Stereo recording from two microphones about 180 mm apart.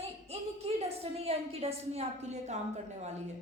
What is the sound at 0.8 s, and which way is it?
Speech, 35° right (ahead or behind).